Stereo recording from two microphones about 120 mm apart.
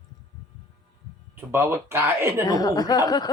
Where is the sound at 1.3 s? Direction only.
20° right (ahead or behind).